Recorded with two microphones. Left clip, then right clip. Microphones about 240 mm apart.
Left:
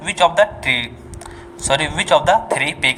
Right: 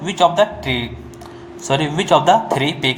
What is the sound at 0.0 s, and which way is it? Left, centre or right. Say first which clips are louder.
Speech: even; left.